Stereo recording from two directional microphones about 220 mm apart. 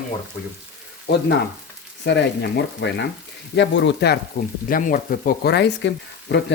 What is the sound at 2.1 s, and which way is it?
Speech, 50° left (ahead or behind).